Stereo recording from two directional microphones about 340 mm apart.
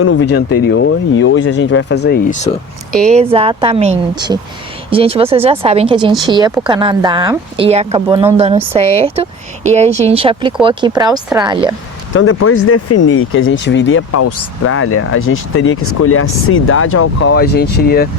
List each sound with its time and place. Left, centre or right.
0.0 s speech: left
3.1 s speech: centre
12.1 s speech: left